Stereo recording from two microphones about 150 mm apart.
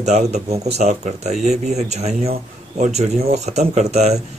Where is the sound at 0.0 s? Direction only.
50° right (ahead or behind).